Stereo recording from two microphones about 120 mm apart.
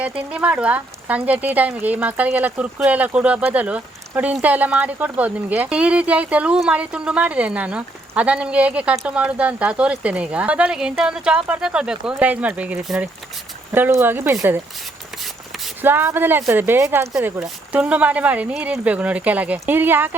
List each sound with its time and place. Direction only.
0.3 s speech: 10° right (ahead or behind)
15.8 s speech: 15° right (ahead or behind)